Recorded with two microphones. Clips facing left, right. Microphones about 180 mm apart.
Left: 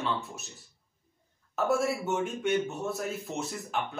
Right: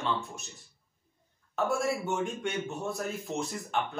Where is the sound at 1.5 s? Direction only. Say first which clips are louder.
Left 2 dB; centre (ahead or behind).